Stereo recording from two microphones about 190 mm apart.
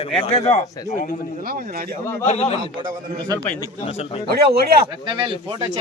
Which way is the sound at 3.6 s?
30° left (ahead or behind).